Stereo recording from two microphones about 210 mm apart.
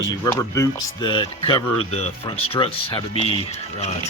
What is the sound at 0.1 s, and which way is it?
Speech, 15° left (ahead or behind).